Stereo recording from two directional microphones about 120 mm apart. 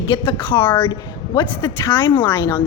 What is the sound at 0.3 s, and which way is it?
A woman's voice, 40° left (ahead or behind).